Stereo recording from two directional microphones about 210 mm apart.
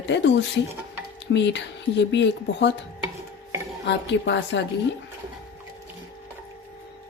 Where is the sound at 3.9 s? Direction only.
60° left (ahead or behind).